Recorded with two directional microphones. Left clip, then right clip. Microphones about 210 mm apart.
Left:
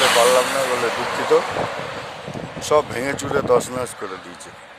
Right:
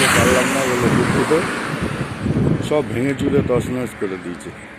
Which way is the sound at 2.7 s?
25° left (ahead or behind).